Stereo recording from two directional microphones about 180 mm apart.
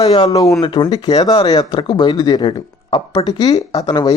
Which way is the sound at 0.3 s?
20° left (ahead or behind).